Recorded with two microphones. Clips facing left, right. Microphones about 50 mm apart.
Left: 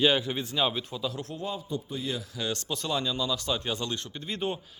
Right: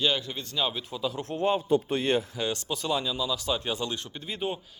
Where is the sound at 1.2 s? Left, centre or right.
Right.